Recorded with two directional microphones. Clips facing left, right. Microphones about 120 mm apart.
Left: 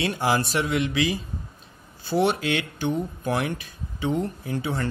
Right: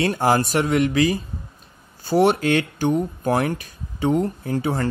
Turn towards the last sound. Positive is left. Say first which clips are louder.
# right 5 dB
turn(degrees=-40)  # may be behind; listen again after turning